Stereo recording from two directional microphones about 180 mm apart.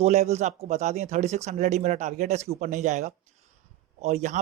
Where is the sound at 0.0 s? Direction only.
35° right (ahead or behind).